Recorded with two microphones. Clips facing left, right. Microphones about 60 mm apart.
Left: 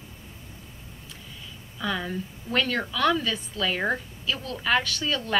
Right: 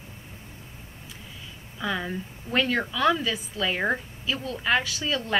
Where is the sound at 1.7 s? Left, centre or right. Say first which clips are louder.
Even; centre.